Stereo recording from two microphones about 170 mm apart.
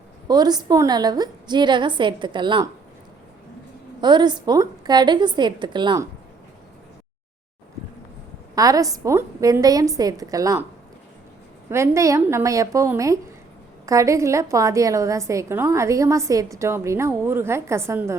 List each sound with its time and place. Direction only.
0.3 s a woman's voice: 25° right (ahead or behind)
4.0 s a woman's voice: 25° right (ahead or behind)
8.5 s a woman's voice: 20° right (ahead or behind)
11.7 s a woman's voice: 15° right (ahead or behind)